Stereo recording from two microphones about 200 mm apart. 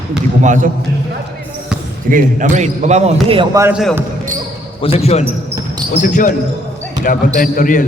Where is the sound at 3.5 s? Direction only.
10° right (ahead or behind).